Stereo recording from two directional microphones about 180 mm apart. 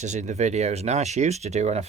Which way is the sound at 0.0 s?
40° right (ahead or behind).